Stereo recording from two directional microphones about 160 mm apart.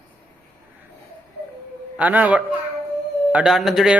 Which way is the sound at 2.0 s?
10° right (ahead or behind).